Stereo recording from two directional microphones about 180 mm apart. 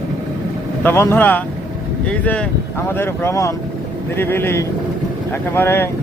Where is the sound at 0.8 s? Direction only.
10° left (ahead or behind).